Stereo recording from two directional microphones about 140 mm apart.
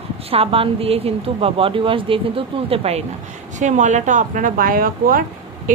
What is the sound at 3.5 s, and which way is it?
Speech, 60° right (ahead or behind).